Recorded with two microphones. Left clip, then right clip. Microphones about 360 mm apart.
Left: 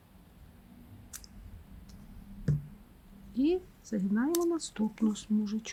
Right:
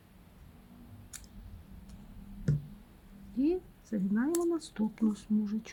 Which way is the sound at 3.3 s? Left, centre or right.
Centre.